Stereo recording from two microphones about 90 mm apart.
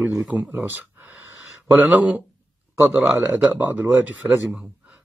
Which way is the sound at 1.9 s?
15° right (ahead or behind).